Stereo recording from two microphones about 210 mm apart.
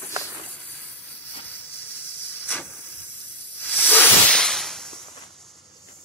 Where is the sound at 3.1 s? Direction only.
60° right (ahead or behind).